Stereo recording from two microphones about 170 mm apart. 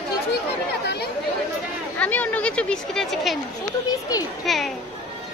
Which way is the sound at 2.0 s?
10° left (ahead or behind).